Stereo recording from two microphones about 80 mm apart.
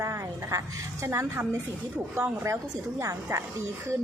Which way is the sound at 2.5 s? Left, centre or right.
Right.